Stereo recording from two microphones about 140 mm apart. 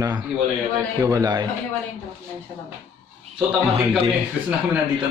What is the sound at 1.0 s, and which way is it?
Speech, 25° right (ahead or behind).